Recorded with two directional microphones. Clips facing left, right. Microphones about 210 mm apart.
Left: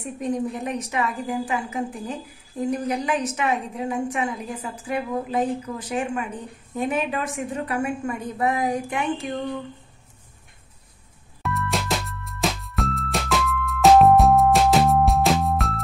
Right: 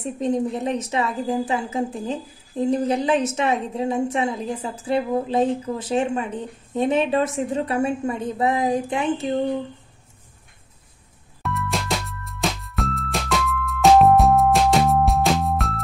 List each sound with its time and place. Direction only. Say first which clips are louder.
0.0 s a woman's voice: right 3 dB; 25° right (ahead or behind)
11.4 s music: even; centre (ahead or behind)